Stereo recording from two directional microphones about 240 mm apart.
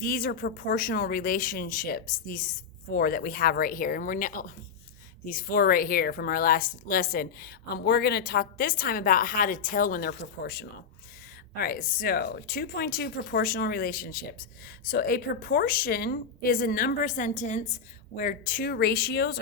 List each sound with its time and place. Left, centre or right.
0.0 s speech: left